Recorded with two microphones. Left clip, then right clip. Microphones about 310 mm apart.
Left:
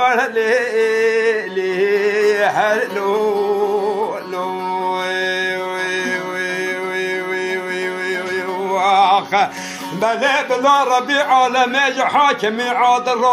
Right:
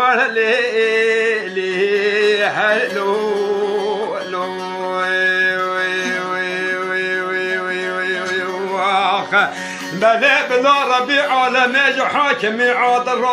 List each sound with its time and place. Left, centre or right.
0.0 s music: centre
8.7 s music: centre
10.0 s speech: left